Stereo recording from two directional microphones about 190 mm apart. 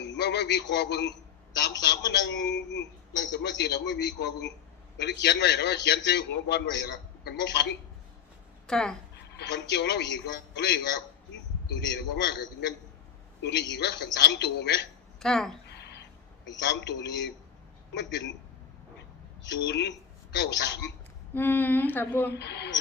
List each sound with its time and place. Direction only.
0.0 s a man's voice: 65° left (ahead or behind)
8.6 s speech: 5° left (ahead or behind)
9.4 s a man's voice: 65° left (ahead or behind)
11.8 s a man's voice: 65° left (ahead or behind)
15.2 s a woman's voice: 5° left (ahead or behind)
15.6 s a sound: 60° left (ahead or behind)
16.5 s a man's voice: 65° left (ahead or behind)
18.9 s a sound: 65° left (ahead or behind)
20.3 s a man's voice: 65° left (ahead or behind)
21.3 s speech: 10° left (ahead or behind)
22.3 s a man's voice: 60° left (ahead or behind)